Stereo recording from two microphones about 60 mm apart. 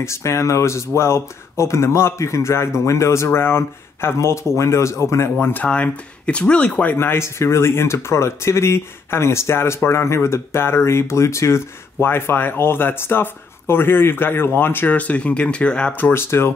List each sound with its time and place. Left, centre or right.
0.0 s speech: left
3.3 s speech: left
5.4 s speech: left
5.7 s speech: centre
7.0 s speech: left; by 15.9 s centre
16.0 s speech: left